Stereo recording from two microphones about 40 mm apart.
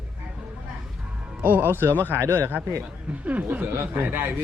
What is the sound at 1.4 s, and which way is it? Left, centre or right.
A man's voice, right.